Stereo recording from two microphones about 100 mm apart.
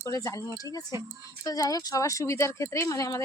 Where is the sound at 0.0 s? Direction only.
30° left (ahead or behind).